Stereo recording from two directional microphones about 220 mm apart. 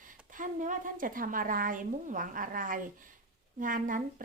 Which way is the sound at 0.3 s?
35° right (ahead or behind).